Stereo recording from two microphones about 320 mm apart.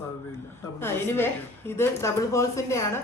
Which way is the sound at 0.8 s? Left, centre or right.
Centre.